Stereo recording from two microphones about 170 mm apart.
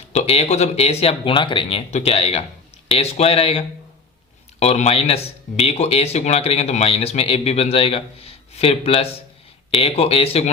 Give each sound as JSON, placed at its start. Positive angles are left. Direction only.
{"t": 0.1, "sound": "speech", "side_deg": 40}
{"t": 4.6, "sound": "speech", "side_deg": 40}